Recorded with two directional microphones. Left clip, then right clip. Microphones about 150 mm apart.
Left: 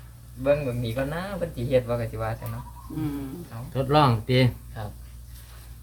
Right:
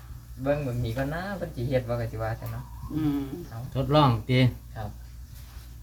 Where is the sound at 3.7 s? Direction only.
30° left (ahead or behind).